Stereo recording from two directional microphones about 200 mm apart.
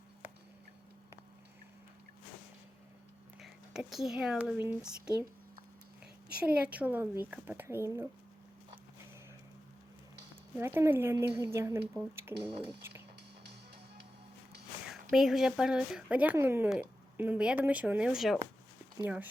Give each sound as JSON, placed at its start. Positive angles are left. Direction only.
{"t": 3.4, "sound": "speech", "side_deg": 0}
{"t": 6.3, "sound": "a woman's voice", "side_deg": -5}
{"t": 10.6, "sound": "a woman's voice", "side_deg": -15}
{"t": 15.1, "sound": "a woman's voice", "side_deg": 0}